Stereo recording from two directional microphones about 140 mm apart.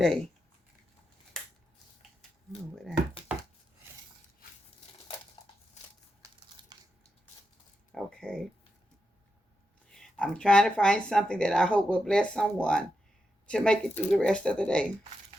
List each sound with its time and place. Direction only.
0.0 s speech: 5° left (ahead or behind)
7.9 s speech: 5° left (ahead or behind)
9.9 s speech: 5° left (ahead or behind)